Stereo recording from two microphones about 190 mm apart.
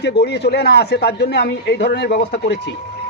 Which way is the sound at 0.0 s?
60° left (ahead or behind).